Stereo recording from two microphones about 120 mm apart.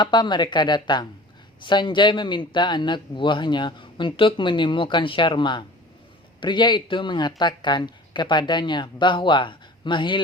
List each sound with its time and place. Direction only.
0.0 s a man's voice: 40° left (ahead or behind)